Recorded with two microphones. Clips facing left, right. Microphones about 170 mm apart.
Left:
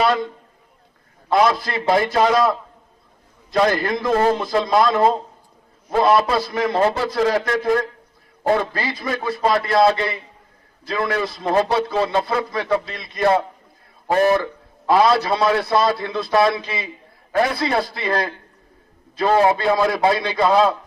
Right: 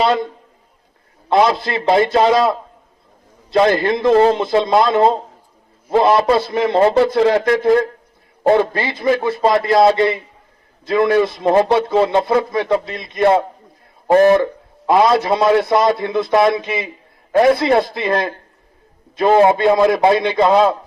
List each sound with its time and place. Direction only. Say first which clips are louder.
1.3 s a man's voice: right 3 dB; 25° right (ahead or behind)